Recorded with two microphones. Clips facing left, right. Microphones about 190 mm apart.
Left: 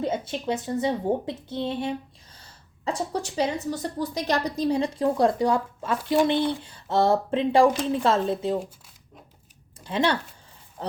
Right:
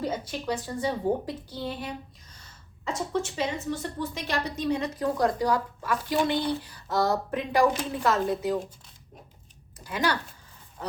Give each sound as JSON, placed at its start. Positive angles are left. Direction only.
{"t": 0.0, "sound": "a woman's voice", "side_deg": 25}
{"t": 2.4, "sound": "a sound", "side_deg": 30}
{"t": 4.0, "sound": "a woman's voice", "side_deg": 35}
{"t": 9.8, "sound": "speech", "side_deg": 30}